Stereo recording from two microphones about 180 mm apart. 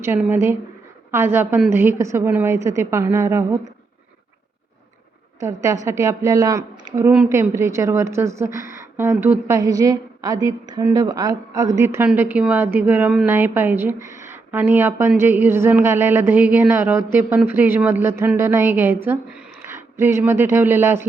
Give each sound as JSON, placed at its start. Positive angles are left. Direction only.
{"t": 0.0, "sound": "a woman's voice", "side_deg": -10}
{"t": 5.4, "sound": "a woman's voice", "side_deg": -15}